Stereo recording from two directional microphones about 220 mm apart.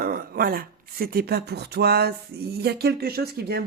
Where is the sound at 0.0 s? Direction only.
40° right (ahead or behind).